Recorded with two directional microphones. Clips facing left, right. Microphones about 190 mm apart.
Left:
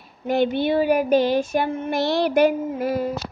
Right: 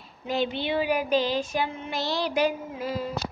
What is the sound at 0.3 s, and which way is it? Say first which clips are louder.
Child singing: left 7 dB; 55° left (ahead or behind).